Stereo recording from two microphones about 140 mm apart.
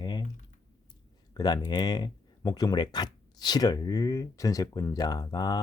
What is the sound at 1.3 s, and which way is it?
Speech, 30° left (ahead or behind).